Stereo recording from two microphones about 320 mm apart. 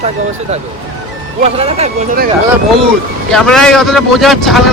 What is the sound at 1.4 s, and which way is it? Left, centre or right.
Speech, centre.